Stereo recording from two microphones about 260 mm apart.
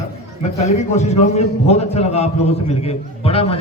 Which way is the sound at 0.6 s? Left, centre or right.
Left.